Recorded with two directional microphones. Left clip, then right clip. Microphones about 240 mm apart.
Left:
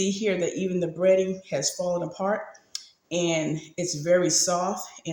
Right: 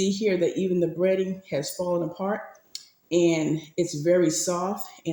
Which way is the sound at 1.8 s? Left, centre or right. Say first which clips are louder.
Even; centre.